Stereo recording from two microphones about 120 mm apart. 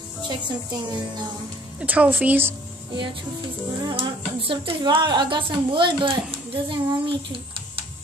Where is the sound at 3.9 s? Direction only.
50° right (ahead or behind).